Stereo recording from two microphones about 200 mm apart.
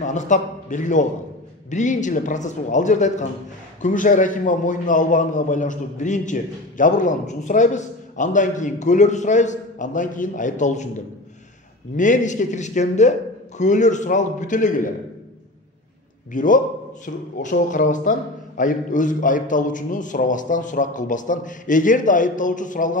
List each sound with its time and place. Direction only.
0.0 s a man's voice: 40° left (ahead or behind)
12.0 s a man's voice: 40° left (ahead or behind)
16.3 s a man's voice: 40° left (ahead or behind)